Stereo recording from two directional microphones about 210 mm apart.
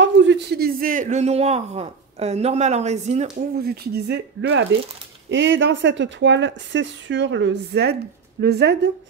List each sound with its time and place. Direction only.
0.0 s speech: 60° right (ahead or behind); by 3.4 s 35° right (ahead or behind)
3.5 s speech: 50° right (ahead or behind)